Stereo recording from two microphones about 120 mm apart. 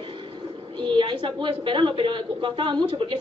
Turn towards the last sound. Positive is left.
turn(degrees=-45)  # may be behind; listen again after turning